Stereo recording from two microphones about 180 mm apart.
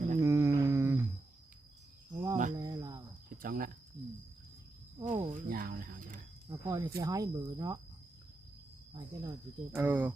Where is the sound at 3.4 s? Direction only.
50° right (ahead or behind).